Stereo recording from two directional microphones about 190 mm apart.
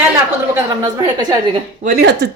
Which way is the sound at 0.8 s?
20° right (ahead or behind).